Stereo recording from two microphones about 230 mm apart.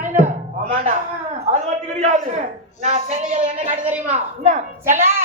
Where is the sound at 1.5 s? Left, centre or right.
Right.